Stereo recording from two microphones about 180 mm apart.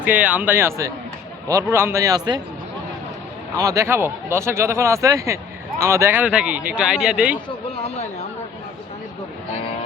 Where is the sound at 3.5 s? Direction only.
20° right (ahead or behind).